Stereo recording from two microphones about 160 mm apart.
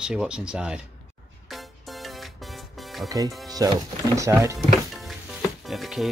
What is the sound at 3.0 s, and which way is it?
Speech, 20° right (ahead or behind).